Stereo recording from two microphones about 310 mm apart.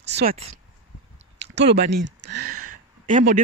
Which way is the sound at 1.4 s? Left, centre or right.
Right.